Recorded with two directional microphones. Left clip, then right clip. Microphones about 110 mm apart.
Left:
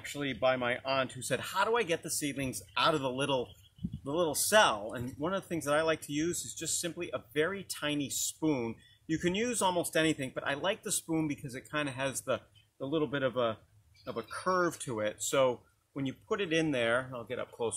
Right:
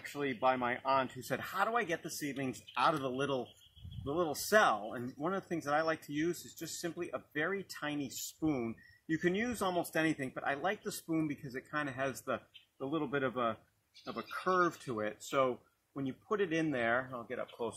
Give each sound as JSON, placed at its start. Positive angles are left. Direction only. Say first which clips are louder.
{"t": 0.4, "sound": "speech", "louder": "left 3 dB", "side_deg": 30}
{"t": 7.0, "sound": "speech", "louder": "left 5 dB", "side_deg": 45}
{"t": 10.1, "sound": "speech", "louder": "left 2 dB", "side_deg": 40}
{"t": 15.0, "sound": "speech", "louder": "left 5 dB", "side_deg": 35}